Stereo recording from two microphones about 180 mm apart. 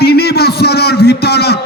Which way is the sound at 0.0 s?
65° left (ahead or behind).